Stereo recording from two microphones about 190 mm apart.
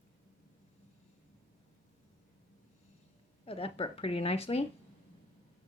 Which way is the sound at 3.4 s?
30° left (ahead or behind).